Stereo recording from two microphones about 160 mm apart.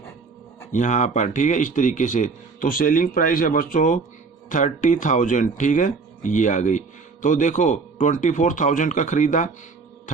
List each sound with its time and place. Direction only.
0.7 s speech: 50° left (ahead or behind)